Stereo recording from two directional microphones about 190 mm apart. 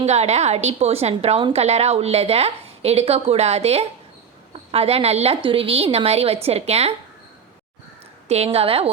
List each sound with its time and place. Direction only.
0.0 s a woman's voice: 35° right (ahead or behind)
8.3 s a woman's voice: 35° right (ahead or behind)